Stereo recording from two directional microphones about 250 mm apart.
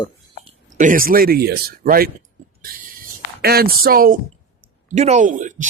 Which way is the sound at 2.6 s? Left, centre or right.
Right.